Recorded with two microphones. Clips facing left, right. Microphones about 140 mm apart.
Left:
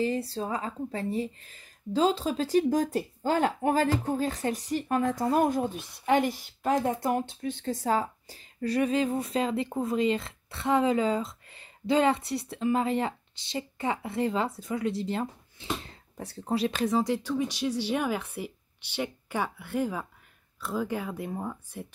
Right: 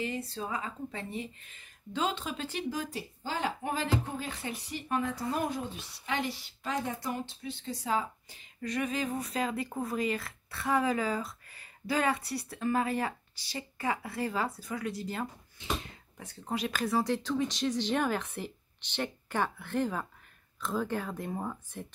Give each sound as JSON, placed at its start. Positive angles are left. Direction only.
{"t": 0.0, "sound": "a woman's voice", "side_deg": 30}